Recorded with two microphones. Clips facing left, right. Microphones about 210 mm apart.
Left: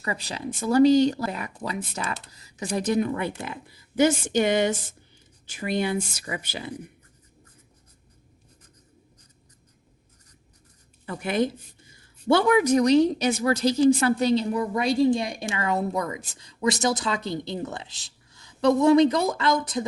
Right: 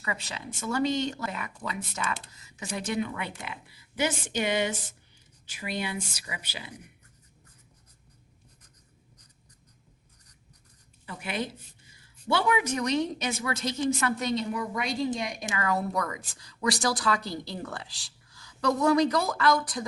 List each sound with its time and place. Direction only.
0.0 s speech: 35° left (ahead or behind)
11.0 s a woman's voice: 50° left (ahead or behind); by 19.8 s 20° left (ahead or behind)